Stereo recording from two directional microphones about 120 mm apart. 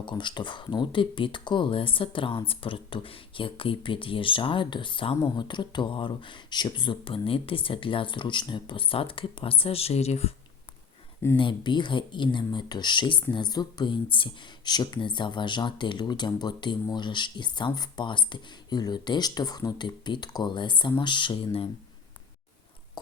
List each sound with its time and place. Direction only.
0.0 s speech: 40° left (ahead or behind); by 10.3 s 60° left (ahead or behind)
11.3 s speech: 40° left (ahead or behind)